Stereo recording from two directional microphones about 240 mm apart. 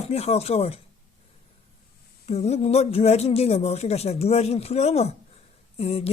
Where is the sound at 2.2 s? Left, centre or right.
Left.